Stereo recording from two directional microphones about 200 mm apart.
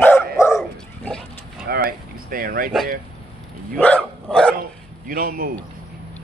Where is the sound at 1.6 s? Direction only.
50° right (ahead or behind).